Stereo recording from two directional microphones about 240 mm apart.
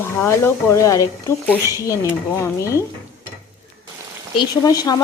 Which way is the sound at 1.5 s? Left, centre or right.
Centre.